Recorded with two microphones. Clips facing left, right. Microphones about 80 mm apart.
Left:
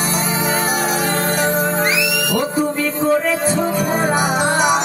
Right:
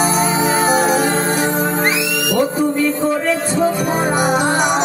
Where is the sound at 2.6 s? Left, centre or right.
Centre.